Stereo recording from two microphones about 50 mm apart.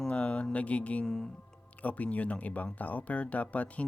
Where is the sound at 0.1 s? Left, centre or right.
Left.